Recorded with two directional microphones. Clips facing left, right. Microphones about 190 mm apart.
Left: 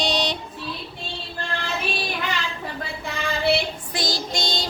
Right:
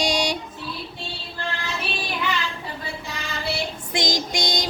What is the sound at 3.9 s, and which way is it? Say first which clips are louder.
Child singing: right 5 dB; 15° right (ahead or behind).